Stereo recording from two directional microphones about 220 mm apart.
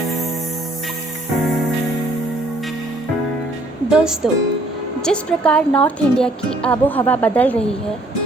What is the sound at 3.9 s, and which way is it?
A woman's voice, 5° right (ahead or behind).